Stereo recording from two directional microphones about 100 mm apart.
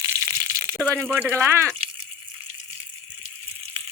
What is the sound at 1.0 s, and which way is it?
Speech, 15° right (ahead or behind).